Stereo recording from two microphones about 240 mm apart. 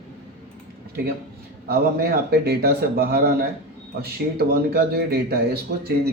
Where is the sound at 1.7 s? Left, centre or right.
Right.